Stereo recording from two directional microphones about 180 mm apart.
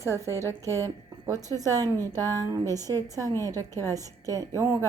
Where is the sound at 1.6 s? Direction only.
20° right (ahead or behind).